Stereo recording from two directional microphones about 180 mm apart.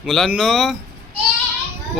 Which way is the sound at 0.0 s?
Centre (ahead or behind).